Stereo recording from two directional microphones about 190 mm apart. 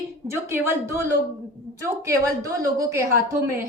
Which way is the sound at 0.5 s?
10° right (ahead or behind).